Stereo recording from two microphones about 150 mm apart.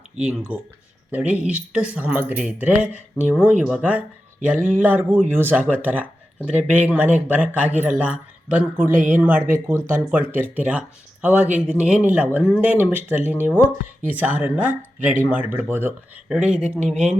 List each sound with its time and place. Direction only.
0.2 s speech: 10° right (ahead or behind)
16.8 s speech: 50° right (ahead or behind)